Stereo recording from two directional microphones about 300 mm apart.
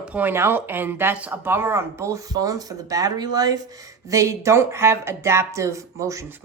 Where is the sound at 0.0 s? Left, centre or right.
Centre.